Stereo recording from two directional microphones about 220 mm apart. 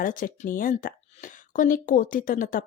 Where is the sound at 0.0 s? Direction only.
40° left (ahead or behind).